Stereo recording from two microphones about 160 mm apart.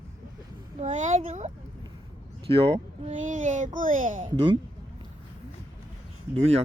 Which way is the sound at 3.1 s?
50° right (ahead or behind).